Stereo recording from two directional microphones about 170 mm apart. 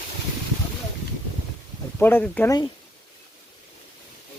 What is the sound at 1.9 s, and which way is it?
Speech, 10° left (ahead or behind).